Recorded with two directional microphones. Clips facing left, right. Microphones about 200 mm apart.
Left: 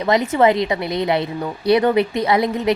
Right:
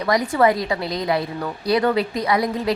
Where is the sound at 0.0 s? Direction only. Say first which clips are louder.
Left 2 dB; 25° left (ahead or behind).